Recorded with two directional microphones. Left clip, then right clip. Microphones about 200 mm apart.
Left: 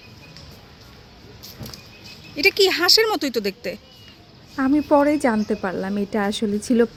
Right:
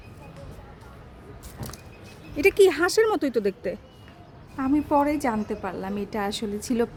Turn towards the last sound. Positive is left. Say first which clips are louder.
# left 7 dB
turn(degrees=15)  # may be behind; listen again after turning